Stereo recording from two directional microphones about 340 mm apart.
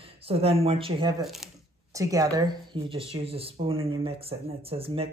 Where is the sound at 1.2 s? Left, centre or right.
Centre.